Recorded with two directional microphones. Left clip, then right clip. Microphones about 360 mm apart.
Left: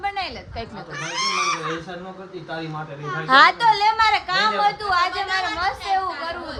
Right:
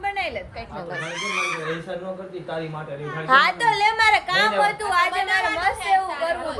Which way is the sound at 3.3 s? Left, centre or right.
Left.